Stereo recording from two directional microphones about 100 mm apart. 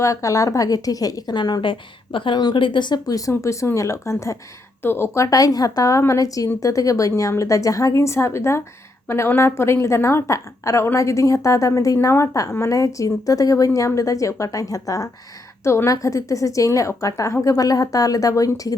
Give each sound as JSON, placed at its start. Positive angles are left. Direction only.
{"t": 0.0, "sound": "a woman's voice", "side_deg": 30}